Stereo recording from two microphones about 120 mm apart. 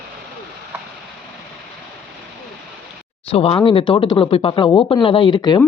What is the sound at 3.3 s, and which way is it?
Speech, 55° left (ahead or behind).